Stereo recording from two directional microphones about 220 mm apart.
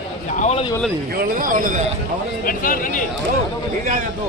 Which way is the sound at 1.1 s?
40° right (ahead or behind).